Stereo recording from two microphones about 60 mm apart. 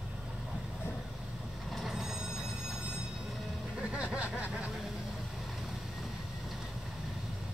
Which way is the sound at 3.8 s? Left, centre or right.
Right.